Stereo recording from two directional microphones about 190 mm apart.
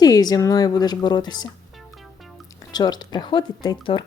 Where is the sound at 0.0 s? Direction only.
20° left (ahead or behind).